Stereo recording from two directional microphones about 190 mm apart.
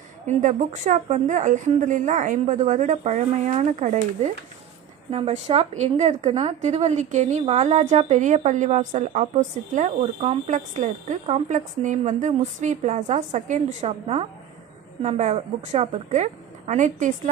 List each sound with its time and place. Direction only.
0.4 s a woman's voice: 40° right (ahead or behind)